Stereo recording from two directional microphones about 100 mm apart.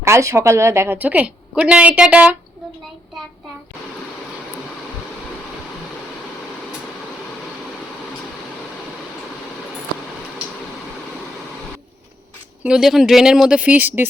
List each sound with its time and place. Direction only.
0.0 s speech: 30° right (ahead or behind)
0.9 s speech: 15° right (ahead or behind)
12.6 s speech: 5° right (ahead or behind)